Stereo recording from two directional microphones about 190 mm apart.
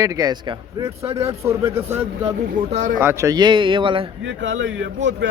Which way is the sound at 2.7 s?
35° right (ahead or behind).